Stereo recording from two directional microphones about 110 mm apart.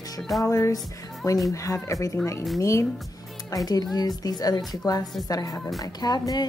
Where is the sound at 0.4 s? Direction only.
30° left (ahead or behind).